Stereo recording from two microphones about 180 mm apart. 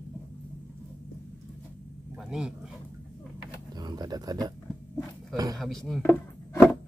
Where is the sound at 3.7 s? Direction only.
20° right (ahead or behind).